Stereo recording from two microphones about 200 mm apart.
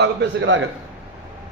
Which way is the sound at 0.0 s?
60° right (ahead or behind).